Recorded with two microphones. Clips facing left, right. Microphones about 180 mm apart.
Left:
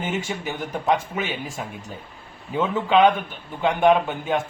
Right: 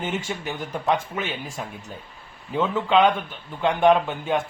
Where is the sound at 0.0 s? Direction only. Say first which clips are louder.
Left 1 dB; 5° left (ahead or behind).